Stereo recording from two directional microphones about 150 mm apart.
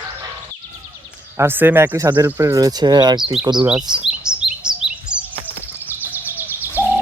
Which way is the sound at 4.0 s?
5° right (ahead or behind).